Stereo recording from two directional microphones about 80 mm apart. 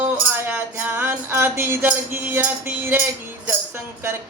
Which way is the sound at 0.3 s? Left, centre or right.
Right.